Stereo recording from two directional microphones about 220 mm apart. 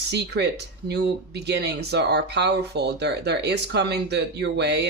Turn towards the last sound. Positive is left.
turn(degrees=-50)  # may be behind; listen again after turning